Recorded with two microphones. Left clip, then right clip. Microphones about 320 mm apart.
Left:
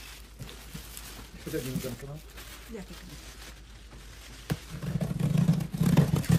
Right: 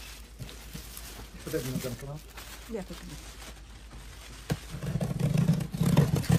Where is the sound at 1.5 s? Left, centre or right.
Centre.